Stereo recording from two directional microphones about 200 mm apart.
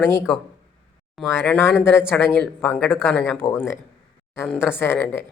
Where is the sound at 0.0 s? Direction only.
10° left (ahead or behind).